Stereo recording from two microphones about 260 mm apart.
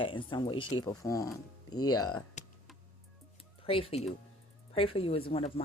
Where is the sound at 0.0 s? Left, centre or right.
Centre.